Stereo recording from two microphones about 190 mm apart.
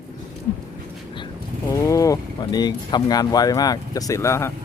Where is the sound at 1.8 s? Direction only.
15° left (ahead or behind).